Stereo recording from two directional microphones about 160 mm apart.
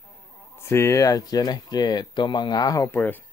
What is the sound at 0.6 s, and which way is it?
Speech, 15° left (ahead or behind).